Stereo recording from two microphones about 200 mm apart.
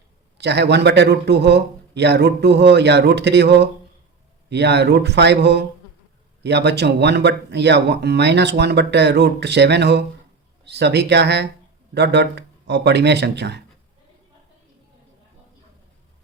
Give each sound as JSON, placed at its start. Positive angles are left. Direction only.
{"t": 0.3, "sound": "speech", "side_deg": -55}